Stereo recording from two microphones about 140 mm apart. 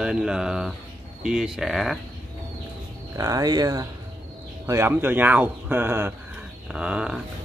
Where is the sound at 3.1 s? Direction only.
25° right (ahead or behind).